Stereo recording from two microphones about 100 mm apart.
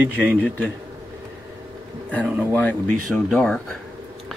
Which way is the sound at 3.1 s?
5° left (ahead or behind).